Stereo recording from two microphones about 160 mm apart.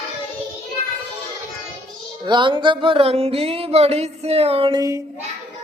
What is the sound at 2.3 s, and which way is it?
Music, 30° right (ahead or behind).